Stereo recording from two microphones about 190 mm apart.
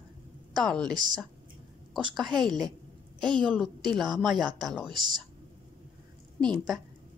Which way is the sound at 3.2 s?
25° right (ahead or behind).